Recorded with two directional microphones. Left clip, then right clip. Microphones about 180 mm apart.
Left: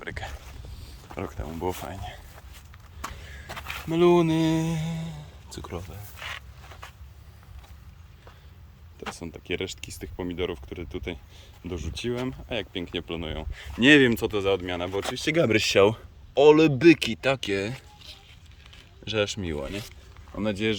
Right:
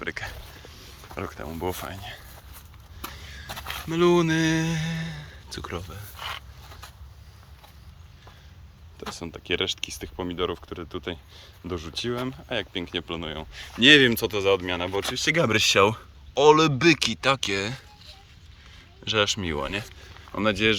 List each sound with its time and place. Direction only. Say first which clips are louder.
0.0 s speech: right 4 dB; 20° left (ahead or behind)
1.1 s speech: right 1 dB; 10° left (ahead or behind)
3.0 s a sound: even; 15° left (ahead or behind)
6.1 s a sound: right 2 dB; 20° right (ahead or behind)
9.0 s speech: right 1 dB; 5° left (ahead or behind)
19.0 s speech: right 4 dB; 5° left (ahead or behind)